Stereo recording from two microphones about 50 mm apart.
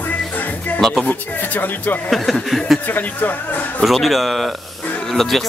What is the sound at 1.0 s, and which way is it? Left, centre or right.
Speech, left.